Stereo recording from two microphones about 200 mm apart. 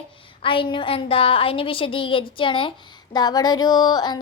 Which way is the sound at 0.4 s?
25° left (ahead or behind).